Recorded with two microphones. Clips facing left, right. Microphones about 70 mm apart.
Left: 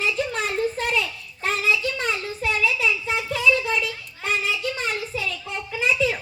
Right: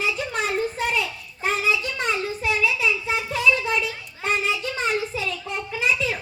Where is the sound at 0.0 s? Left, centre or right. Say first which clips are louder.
Left 1 dB; centre.